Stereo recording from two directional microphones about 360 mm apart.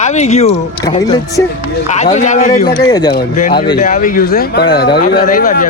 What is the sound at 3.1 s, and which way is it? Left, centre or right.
Speech, left.